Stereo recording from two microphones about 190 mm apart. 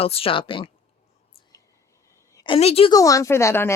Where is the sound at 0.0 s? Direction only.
30° left (ahead or behind).